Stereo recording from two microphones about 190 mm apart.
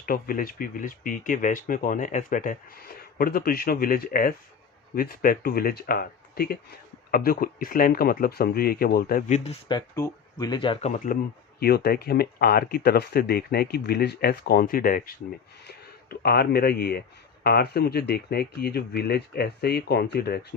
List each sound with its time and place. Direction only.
0.0 s speech: 50° left (ahead or behind)
9.4 s speech: 30° left (ahead or behind)
11.6 s speech: 55° left (ahead or behind)